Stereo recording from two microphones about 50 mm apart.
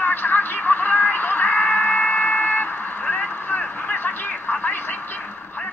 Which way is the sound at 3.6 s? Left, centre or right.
Left.